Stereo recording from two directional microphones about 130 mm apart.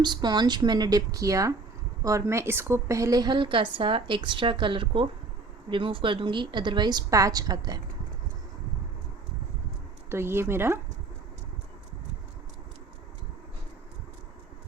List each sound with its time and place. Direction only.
0.0 s a woman's voice: 35° right (ahead or behind)
10.1 s speech: 20° right (ahead or behind)